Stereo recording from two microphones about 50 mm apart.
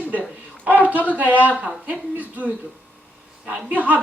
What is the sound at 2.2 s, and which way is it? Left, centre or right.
Speech, right.